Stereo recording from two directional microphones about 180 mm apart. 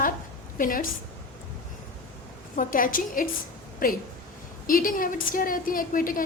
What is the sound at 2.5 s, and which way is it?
A woman's voice, 50° left (ahead or behind).